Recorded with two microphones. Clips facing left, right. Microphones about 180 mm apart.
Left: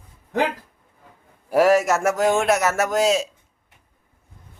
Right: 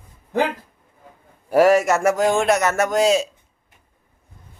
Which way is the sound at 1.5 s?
Centre (ahead or behind).